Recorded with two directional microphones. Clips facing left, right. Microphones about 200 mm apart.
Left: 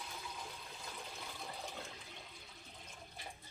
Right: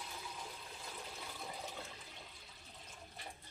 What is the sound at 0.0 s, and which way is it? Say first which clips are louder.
Toilet flush: even; 5° right (ahead or behind).